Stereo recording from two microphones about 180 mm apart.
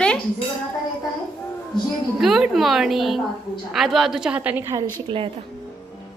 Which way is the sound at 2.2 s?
Centre (ahead or behind).